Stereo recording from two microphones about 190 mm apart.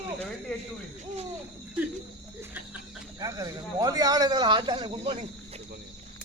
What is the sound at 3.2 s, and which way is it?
A man's voice, 20° right (ahead or behind).